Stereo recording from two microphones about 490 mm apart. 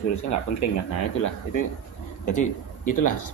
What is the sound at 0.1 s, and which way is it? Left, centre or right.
Speech, left.